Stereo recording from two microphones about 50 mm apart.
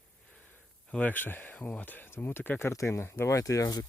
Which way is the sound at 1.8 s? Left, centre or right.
Left.